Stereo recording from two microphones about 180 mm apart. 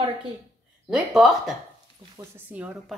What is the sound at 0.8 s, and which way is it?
Speech, centre (ahead or behind).